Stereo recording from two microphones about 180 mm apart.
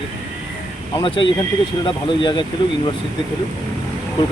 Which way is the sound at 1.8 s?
25° left (ahead or behind).